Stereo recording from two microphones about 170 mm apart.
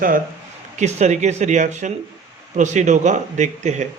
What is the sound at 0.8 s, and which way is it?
Speech, 40° right (ahead or behind).